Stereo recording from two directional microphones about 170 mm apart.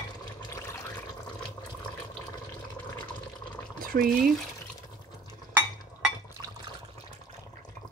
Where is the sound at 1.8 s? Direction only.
5° left (ahead or behind).